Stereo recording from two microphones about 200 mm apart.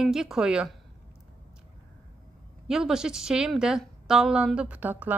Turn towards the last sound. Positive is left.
turn(degrees=-10)  # may be behind; listen again after turning